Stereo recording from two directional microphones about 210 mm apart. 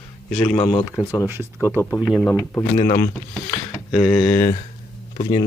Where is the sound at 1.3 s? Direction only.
10° right (ahead or behind).